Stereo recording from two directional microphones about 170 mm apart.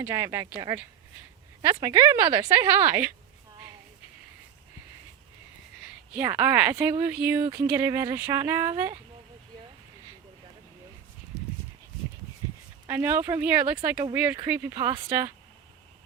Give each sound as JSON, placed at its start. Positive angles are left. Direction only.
{"t": 0.0, "sound": "speech", "side_deg": -15}
{"t": 1.8, "sound": "speech", "side_deg": -15}
{"t": 6.1, "sound": "speech", "side_deg": -10}
{"t": 11.3, "sound": "clip-clop", "side_deg": -5}
{"t": 12.9, "sound": "speech", "side_deg": -10}